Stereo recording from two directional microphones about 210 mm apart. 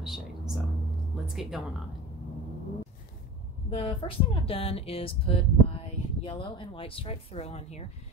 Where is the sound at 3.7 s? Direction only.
25° left (ahead or behind).